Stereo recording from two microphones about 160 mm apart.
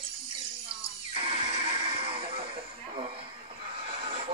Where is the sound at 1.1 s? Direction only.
35° right (ahead or behind).